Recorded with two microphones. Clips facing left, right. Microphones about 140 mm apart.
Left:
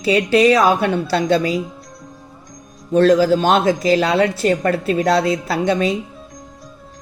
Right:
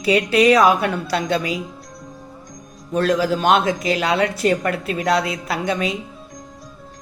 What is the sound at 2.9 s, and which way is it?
A woman's voice, 30° left (ahead or behind).